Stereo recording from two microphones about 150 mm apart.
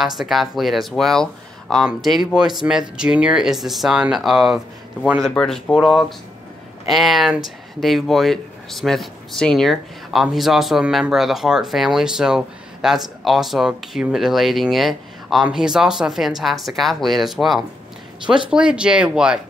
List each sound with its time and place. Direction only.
0.0 s speech: centre (ahead or behind)